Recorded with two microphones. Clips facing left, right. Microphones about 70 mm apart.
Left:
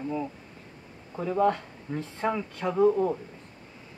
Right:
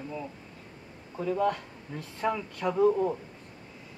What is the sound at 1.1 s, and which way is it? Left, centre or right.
Speech, left.